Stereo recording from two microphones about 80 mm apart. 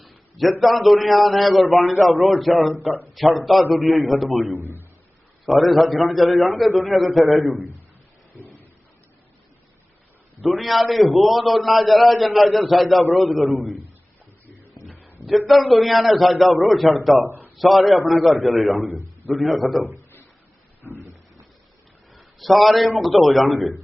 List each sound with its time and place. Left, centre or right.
0.0 s a sound: centre
0.6 s a man's voice: centre
4.6 s a man's voice: right
5.5 s a man's voice: centre
10.4 s a man's voice: centre
15.4 s a man's voice: centre
18.9 s a man's voice: right
19.3 s a man's voice: centre
20.9 s a sound: right
22.1 s a man's voice: centre